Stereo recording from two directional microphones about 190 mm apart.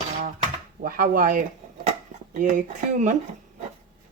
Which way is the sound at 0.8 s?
45° right (ahead or behind).